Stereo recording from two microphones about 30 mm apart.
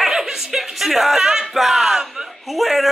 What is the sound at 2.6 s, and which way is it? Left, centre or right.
Speech, centre.